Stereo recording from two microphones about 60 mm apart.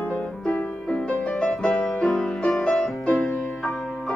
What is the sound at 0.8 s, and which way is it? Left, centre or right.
Music, centre.